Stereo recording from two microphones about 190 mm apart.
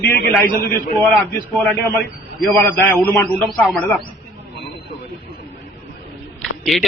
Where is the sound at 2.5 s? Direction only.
10° left (ahead or behind).